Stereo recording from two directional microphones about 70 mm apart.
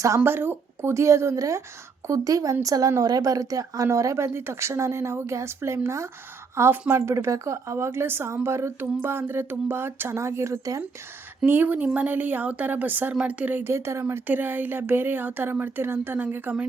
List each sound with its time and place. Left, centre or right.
0.3 s a woman's voice: right
11.4 s speech: right
13.7 s a woman's voice: right
14.3 s speech: right
16.1 s speech: right